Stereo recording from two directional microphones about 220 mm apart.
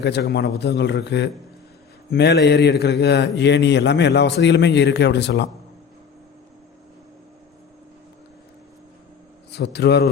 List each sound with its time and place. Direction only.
0.0 s a man's voice: 50° left (ahead or behind)
9.5 s a man's voice: 50° left (ahead or behind)